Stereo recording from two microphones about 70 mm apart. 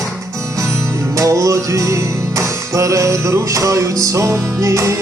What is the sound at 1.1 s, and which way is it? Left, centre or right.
Music, right.